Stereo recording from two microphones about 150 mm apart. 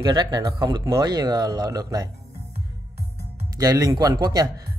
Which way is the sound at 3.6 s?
25° right (ahead or behind).